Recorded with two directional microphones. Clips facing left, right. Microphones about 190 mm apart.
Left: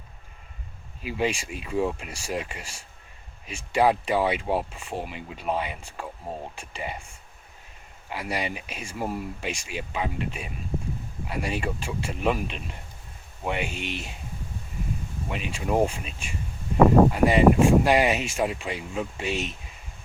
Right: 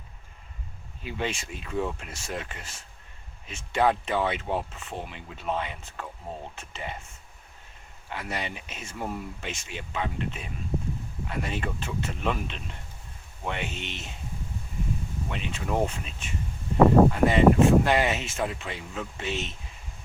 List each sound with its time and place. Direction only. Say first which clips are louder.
1.0 s speech: left 5 dB; 10° left (ahead or behind)
15.3 s speech: left 4 dB; 10° left (ahead or behind)